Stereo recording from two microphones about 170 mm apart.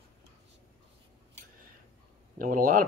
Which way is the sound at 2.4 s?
55° right (ahead or behind).